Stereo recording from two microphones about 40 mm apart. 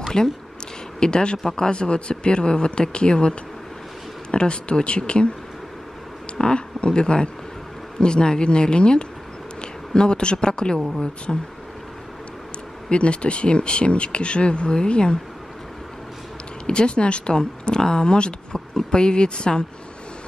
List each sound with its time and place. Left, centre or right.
0.1 s speech: centre
6.3 s speech: left
11.3 s speech: centre
12.9 s speech: left
16.6 s speech: left